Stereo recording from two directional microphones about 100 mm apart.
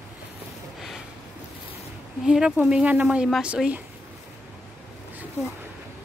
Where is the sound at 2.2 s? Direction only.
10° right (ahead or behind).